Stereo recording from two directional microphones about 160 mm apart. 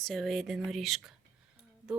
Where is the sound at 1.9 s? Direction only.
5° right (ahead or behind).